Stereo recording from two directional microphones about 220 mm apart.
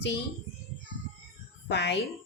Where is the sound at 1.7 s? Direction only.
50° left (ahead or behind).